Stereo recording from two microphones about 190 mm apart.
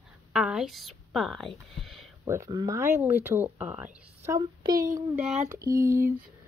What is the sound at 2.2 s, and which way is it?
Speech, 15° right (ahead or behind).